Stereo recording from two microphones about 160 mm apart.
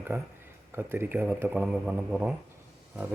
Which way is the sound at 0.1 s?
10° right (ahead or behind).